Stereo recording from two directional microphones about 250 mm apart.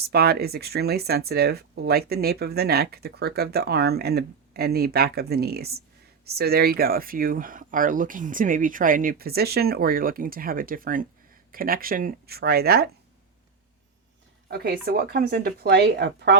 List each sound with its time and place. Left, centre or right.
0.0 s speech: right
14.4 s speech: right